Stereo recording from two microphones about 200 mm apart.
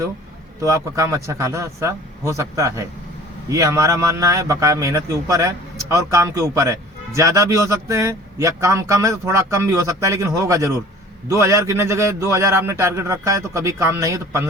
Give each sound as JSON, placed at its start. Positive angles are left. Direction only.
{"t": 0.6, "sound": "a man's voice", "side_deg": -15}